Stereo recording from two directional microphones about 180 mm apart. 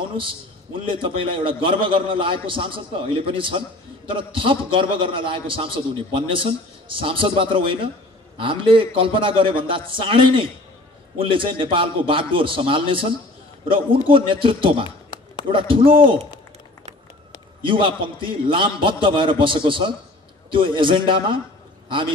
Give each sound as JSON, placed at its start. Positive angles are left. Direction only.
{"t": 0.2, "sound": "a man's voice", "side_deg": -30}
{"t": 17.6, "sound": "a man's voice", "side_deg": -30}